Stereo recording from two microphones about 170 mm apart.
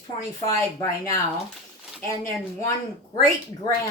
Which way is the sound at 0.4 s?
20° left (ahead or behind).